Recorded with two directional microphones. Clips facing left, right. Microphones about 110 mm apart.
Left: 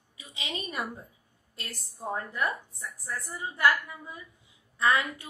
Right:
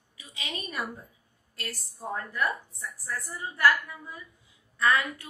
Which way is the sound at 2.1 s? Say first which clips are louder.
Right 1 dB; 20° left (ahead or behind).